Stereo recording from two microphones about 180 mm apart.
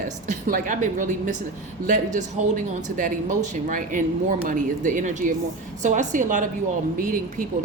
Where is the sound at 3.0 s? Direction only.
45° right (ahead or behind).